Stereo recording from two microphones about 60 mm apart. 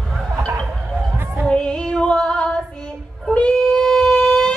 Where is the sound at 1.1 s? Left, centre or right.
Right.